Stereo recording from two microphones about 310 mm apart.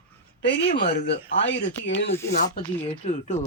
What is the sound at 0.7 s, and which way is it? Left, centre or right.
Speech, left.